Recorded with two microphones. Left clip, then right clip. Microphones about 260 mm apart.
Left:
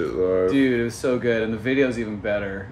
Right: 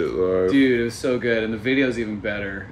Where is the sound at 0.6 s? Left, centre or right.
Centre.